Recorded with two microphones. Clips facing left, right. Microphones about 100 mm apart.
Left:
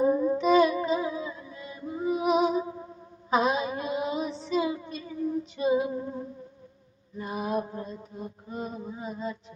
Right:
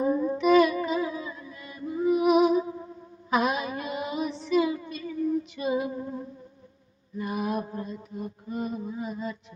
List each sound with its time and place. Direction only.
0.1 s music: 15° left (ahead or behind)
3.2 s child singing: 25° left (ahead or behind)
5.5 s female singing: 25° left (ahead or behind)
7.2 s mantra: 25° left (ahead or behind)